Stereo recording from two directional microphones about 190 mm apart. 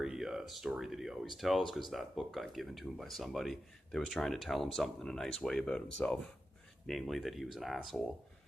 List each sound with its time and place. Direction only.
0.0 s speech: 5° right (ahead or behind)